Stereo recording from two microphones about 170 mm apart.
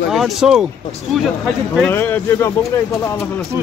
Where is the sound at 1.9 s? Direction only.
10° left (ahead or behind).